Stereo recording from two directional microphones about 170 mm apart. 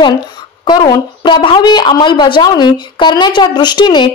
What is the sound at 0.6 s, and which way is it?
A woman's voice, 25° left (ahead or behind).